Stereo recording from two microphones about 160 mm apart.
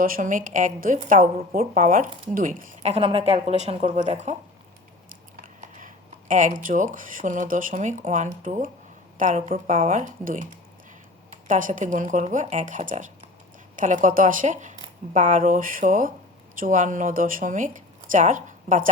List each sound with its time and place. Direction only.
0.0 s a woman's voice: 60° right (ahead or behind)
2.8 s speech: 40° right (ahead or behind)
5.4 s speech: 55° right (ahead or behind)
11.4 s a woman's voice: 55° right (ahead or behind)